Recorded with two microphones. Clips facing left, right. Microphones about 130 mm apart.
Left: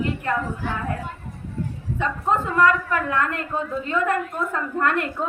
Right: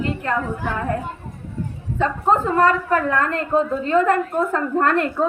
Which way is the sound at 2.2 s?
35° right (ahead or behind).